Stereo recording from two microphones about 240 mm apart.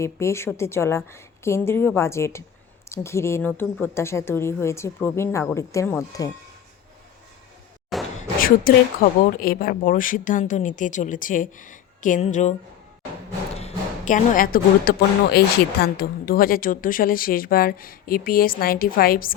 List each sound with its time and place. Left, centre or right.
0.0 s a woman's voice: centre
7.9 s a sound: centre
8.4 s speech: left
13.6 s speech: left